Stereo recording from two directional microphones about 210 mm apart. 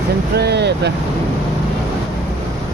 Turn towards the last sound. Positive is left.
turn(degrees=-50)  # may be behind; listen again after turning